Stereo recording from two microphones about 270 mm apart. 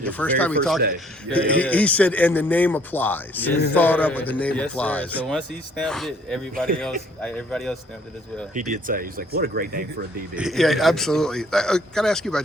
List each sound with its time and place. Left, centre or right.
0.0 s a man's voice: centre
8.5 s speech: right
10.3 s a man's voice: centre